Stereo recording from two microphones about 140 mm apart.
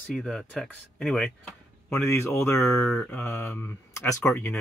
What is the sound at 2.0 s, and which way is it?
Speech, 20° left (ahead or behind).